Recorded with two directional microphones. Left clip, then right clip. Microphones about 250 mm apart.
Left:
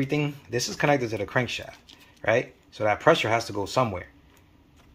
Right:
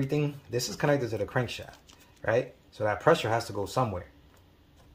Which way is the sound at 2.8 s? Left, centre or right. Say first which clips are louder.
Left 4 dB; left.